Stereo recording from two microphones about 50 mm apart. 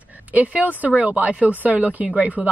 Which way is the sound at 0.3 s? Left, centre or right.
Right.